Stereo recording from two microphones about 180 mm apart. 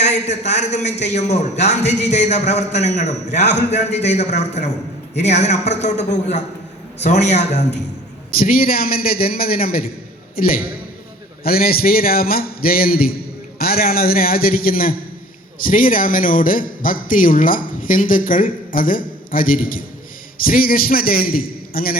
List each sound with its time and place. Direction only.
0.0 s a man's voice: 40° left (ahead or behind)
8.4 s a man's voice: 55° left (ahead or behind)